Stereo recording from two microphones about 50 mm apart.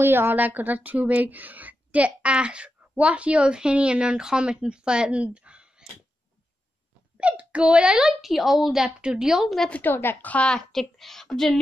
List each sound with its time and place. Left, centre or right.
0.0 s a woman's voice: right
0.4 s a woman's voice: right
7.2 s a child's voice: right
8.2 s a woman's voice: centre
8.8 s a woman's voice: centre
9.4 s a woman's voice: centre
9.7 s a woman's voice: left
10.7 s a woman's voice: centre